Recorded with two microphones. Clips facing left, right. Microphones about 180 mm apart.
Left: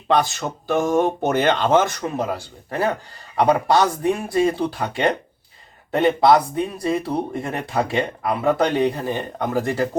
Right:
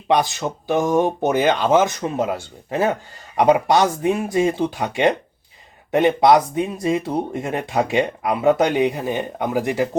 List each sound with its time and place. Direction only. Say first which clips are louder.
0.1 s speech: right 1 dB; 15° right (ahead or behind)
2.0 s speech: right 2 dB; 25° right (ahead or behind)